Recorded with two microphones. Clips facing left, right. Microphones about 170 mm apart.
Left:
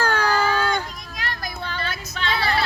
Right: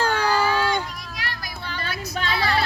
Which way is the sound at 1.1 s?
50° left (ahead or behind).